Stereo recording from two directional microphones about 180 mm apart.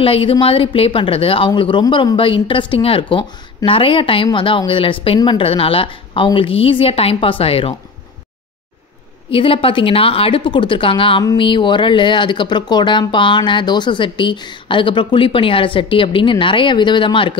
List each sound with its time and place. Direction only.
0.0 s speech: 30° left (ahead or behind)
9.3 s speech: 30° left (ahead or behind)